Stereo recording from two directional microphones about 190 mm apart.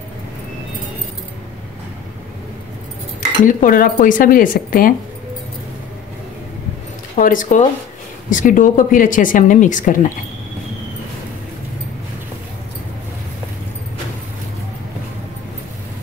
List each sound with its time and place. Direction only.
3.4 s speech: 45° left (ahead or behind)
7.2 s speech: 45° left (ahead or behind)